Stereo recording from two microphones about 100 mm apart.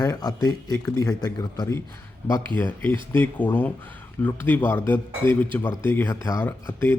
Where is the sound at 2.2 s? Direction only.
20° left (ahead or behind).